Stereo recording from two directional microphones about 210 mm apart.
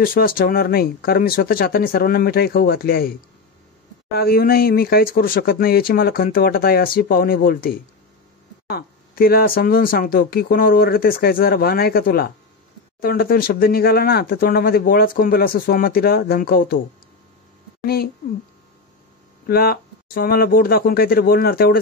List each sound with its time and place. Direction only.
0.0 s speech: 45° left (ahead or behind)
17.8 s speech: 45° left (ahead or behind)
19.4 s speech: 45° left (ahead or behind)